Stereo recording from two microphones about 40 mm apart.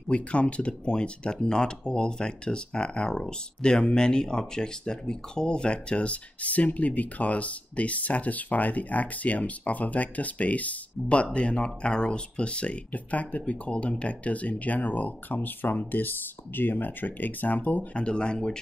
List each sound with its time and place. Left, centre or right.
0.1 s speech: left
17.9 s speech: left